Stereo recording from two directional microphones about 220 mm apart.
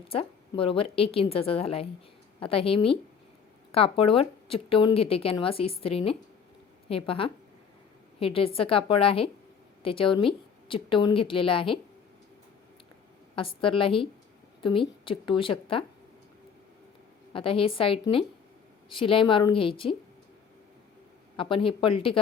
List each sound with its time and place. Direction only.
0.1 s a woman's voice: 25° left (ahead or behind)
13.3 s a woman's voice: 25° left (ahead or behind)
17.3 s a woman's voice: 25° left (ahead or behind)
21.3 s a woman's voice: 25° left (ahead or behind)